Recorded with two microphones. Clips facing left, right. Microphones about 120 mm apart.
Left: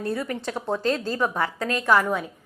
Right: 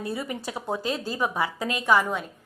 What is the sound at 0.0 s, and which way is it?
A woman's voice, 10° right (ahead or behind).